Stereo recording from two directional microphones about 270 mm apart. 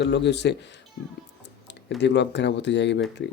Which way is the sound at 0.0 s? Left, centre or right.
Left.